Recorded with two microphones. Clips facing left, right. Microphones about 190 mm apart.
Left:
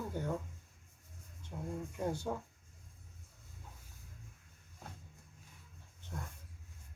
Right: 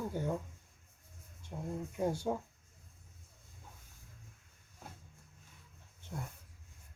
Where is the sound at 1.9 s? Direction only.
10° right (ahead or behind).